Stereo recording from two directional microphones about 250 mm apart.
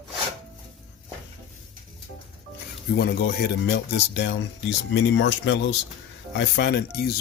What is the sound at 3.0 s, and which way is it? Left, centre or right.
Speech, left.